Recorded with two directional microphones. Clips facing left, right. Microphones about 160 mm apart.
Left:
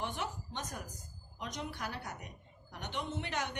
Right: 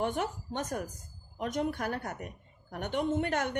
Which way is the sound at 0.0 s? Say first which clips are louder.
Right 7 dB; 50° right (ahead or behind).